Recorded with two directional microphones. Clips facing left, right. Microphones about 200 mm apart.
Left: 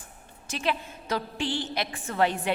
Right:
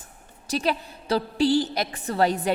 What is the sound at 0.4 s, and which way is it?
A woman's voice, 40° right (ahead or behind).